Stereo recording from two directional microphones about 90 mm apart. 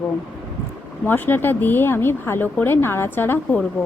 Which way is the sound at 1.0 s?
20° left (ahead or behind).